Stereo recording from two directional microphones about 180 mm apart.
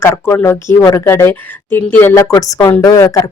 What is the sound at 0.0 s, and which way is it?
A woman's voice, 15° left (ahead or behind).